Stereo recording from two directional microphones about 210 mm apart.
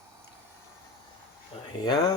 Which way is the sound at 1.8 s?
20° left (ahead or behind).